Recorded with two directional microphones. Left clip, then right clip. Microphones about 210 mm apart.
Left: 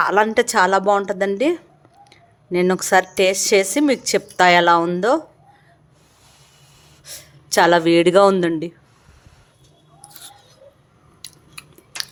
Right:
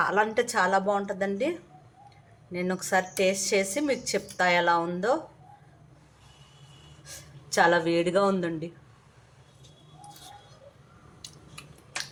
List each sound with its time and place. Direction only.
0.0 s a woman's voice: 40° left (ahead or behind)
7.0 s speech: 50° left (ahead or behind)
11.6 s chewing: 55° left (ahead or behind)